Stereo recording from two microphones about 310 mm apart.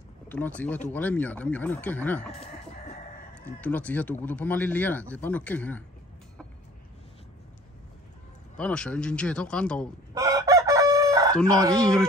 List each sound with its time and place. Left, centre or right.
0.3 s speech: centre
3.4 s speech: centre
8.5 s speech: centre
10.1 s chicken: centre
11.7 s speech: centre